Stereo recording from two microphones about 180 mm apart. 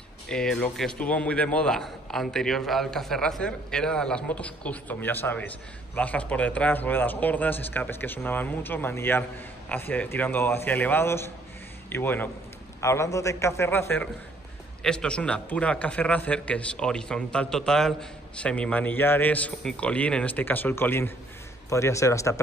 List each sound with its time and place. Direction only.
0.3 s a man's voice: 5° left (ahead or behind)